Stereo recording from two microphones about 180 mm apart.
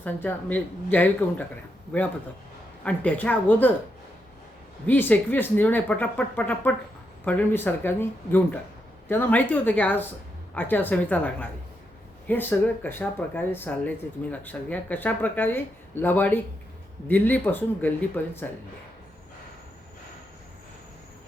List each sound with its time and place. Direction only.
0.0 s speech: 10° left (ahead or behind)
4.9 s speech: 10° left (ahead or behind)